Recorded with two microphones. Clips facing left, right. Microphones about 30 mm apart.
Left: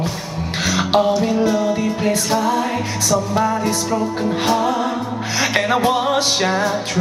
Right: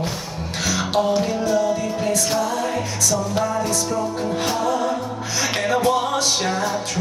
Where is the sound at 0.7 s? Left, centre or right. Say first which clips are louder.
Left 4 dB; left.